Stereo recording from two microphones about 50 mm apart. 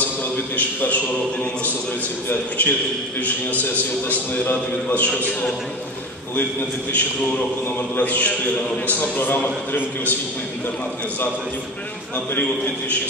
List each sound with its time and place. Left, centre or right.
0.6 s a man's voice: left
6.9 s a man's voice: left